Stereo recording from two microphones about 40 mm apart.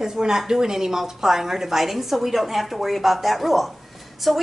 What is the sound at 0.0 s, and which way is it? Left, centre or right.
A woman's voice, centre.